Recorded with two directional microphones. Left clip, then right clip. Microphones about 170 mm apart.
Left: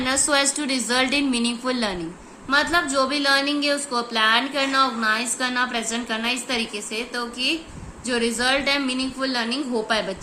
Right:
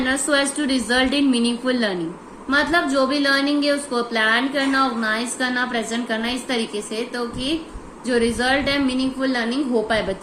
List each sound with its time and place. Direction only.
0.0 s a woman's voice: 25° left (ahead or behind)